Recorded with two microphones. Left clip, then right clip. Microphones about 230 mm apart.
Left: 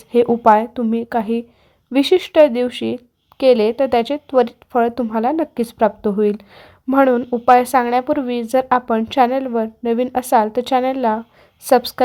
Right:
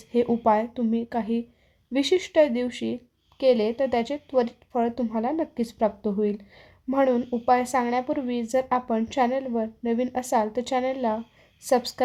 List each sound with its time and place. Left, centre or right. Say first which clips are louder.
0.1 s speech: left 10 dB; left